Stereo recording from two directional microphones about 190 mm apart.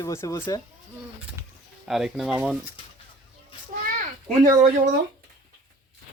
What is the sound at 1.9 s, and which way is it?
Speech, centre (ahead or behind).